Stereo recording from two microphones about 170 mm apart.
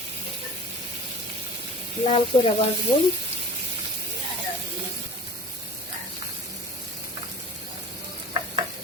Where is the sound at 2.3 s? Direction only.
35° left (ahead or behind).